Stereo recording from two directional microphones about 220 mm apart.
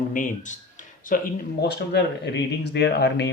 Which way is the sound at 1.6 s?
50° left (ahead or behind).